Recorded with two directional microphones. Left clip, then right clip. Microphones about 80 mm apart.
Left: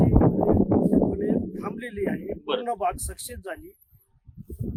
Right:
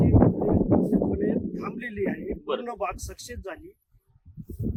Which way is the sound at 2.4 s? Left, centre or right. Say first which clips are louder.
Left 2 dB; left.